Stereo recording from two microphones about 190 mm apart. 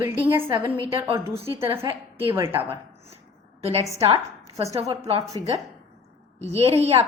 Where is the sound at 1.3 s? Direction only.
30° right (ahead or behind).